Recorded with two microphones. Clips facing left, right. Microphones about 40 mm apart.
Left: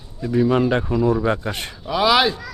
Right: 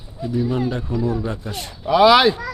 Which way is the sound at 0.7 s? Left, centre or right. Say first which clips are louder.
Left 4 dB; left.